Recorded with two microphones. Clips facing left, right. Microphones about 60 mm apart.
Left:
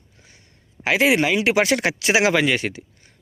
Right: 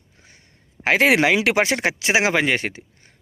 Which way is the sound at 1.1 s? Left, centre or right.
Right.